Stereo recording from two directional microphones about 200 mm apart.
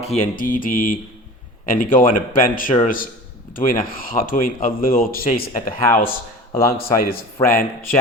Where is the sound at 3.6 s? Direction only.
45° left (ahead or behind).